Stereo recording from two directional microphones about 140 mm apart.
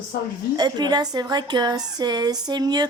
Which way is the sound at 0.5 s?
30° right (ahead or behind).